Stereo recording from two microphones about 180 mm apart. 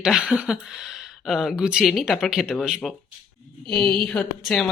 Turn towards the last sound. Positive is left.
turn(degrees=5)  # may be behind; listen again after turning